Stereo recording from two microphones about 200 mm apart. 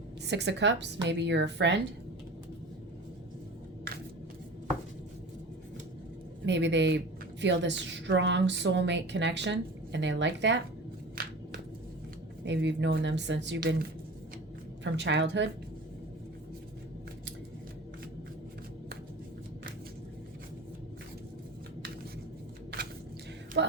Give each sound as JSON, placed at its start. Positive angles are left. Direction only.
{"t": 0.3, "sound": "a woman's voice", "side_deg": -60}
{"t": 6.4, "sound": "a woman's voice", "side_deg": -60}
{"t": 11.2, "sound": "a sound", "side_deg": -45}
{"t": 12.5, "sound": "a woman's voice", "side_deg": -65}
{"t": 14.9, "sound": "a woman's voice", "side_deg": -60}
{"t": 23.6, "sound": "a sound", "side_deg": -60}